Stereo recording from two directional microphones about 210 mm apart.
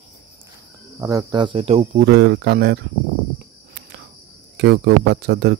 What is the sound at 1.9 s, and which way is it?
Speech, 50° right (ahead or behind).